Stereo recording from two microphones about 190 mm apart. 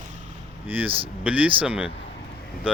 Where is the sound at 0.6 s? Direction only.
10° right (ahead or behind).